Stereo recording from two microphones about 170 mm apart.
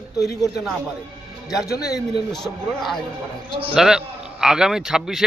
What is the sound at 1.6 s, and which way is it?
Speech, 70° left (ahead or behind).